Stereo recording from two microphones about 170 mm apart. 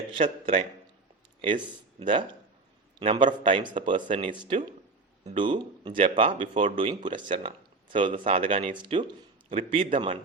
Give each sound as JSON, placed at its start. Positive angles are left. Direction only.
{"t": 0.1, "sound": "a man's voice", "side_deg": -30}
{"t": 2.0, "sound": "speech", "side_deg": -30}